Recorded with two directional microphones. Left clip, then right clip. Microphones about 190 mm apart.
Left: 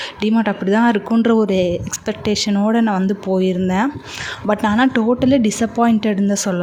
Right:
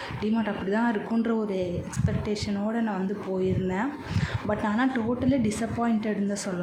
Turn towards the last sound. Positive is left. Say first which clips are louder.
# left 11 dB
turn(degrees=45)  # may be behind; listen again after turning